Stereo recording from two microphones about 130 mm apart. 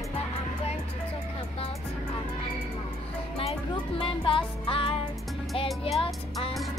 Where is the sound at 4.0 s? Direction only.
40° left (ahead or behind).